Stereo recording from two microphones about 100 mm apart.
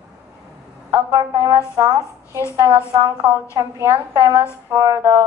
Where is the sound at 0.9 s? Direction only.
40° right (ahead or behind).